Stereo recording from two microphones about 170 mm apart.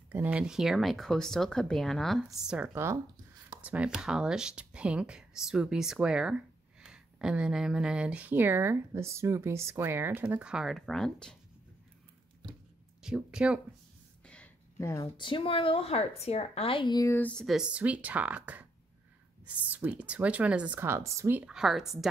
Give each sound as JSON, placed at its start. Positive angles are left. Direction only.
{"t": 0.1, "sound": "speech", "side_deg": -10}
{"t": 13.0, "sound": "speech", "side_deg": -5}
{"t": 14.2, "sound": "a sound", "side_deg": 5}
{"t": 14.8, "sound": "a woman's voice", "side_deg": 15}
{"t": 15.1, "sound": "a woman's voice", "side_deg": 30}
{"t": 17.2, "sound": "speech", "side_deg": 5}